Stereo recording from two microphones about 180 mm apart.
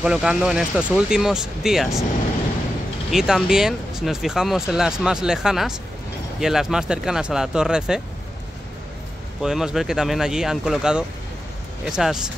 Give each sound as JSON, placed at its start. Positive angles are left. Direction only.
{"t": 0.0, "sound": "speech", "side_deg": -5}
{"t": 3.1, "sound": "speech", "side_deg": -5}
{"t": 9.4, "sound": "speech", "side_deg": -5}